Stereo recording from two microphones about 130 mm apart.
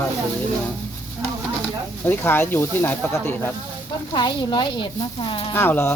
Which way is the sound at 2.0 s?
15° left (ahead or behind).